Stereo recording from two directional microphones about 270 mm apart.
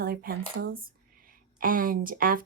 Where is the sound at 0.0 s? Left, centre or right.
Right.